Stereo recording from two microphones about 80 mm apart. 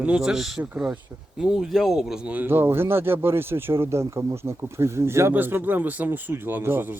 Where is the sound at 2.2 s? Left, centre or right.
Right.